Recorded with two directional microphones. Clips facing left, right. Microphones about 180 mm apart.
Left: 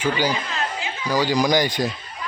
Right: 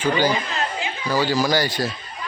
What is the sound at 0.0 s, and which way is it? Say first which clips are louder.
Speech: right 2 dB; 10° left (ahead or behind).